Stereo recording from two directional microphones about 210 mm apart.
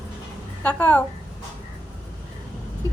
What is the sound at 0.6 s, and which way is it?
Speech, 5° left (ahead or behind).